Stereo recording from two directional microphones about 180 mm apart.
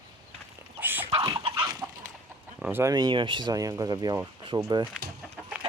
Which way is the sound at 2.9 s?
25° right (ahead or behind).